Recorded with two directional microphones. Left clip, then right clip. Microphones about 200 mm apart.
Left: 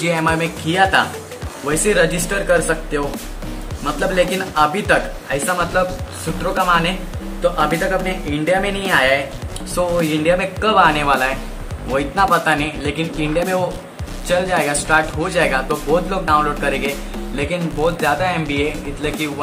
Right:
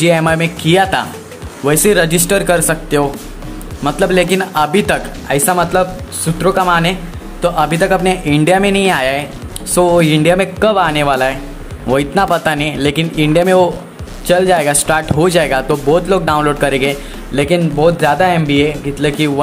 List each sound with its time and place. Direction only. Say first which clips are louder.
0.0 s speech: right 6 dB; 35° right (ahead or behind)